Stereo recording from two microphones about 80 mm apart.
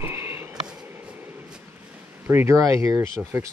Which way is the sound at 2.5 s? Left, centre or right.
Right.